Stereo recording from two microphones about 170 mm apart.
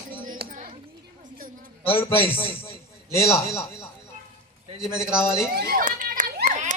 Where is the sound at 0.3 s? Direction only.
50° right (ahead or behind).